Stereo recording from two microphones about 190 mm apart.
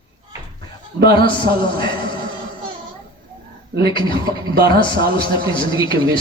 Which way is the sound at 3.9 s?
25° left (ahead or behind).